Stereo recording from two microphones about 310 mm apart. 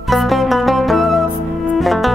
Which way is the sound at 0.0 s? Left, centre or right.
Centre.